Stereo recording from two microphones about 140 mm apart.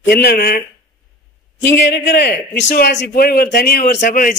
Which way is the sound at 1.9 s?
90° left.